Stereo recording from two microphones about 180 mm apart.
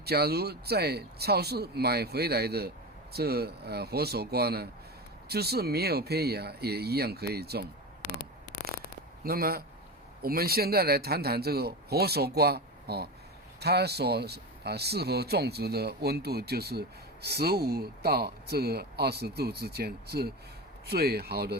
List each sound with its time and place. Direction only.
0.0 s speech: 60° right (ahead or behind)
9.2 s speech: 55° right (ahead or behind)